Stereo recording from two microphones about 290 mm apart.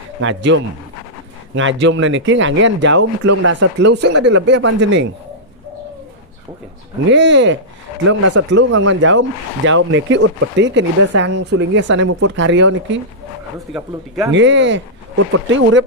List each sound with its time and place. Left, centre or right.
0.2 s speech: right
7.1 s speech: right
8.0 s speech: right
8.7 s speech: right
13.7 s speech: centre
14.3 s speech: right